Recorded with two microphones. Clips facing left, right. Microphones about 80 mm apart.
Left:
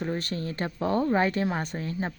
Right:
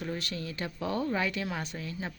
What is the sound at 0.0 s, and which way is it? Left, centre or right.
Speech, left.